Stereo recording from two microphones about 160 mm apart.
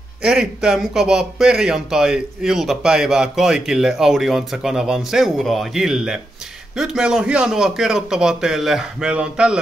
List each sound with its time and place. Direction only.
0.2 s speech: 5° right (ahead or behind)